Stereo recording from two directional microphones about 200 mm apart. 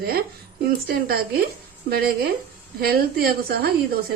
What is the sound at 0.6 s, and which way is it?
A woman's voice, 50° right (ahead or behind).